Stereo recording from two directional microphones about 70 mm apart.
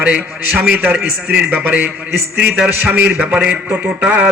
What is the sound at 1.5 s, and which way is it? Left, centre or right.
Speech, right.